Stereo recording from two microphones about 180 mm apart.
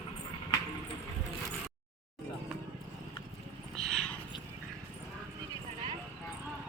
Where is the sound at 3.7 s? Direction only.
Centre (ahead or behind).